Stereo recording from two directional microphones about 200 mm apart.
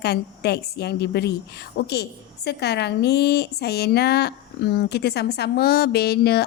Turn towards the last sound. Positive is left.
turn(degrees=55)  # may be behind; listen again after turning